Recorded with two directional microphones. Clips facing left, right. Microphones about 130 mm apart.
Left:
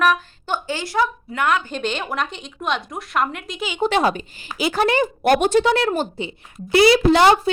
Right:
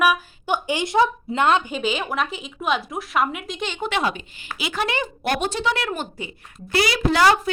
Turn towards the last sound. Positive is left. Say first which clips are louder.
# left 4 dB
turn(degrees=25)  # may be behind; listen again after turning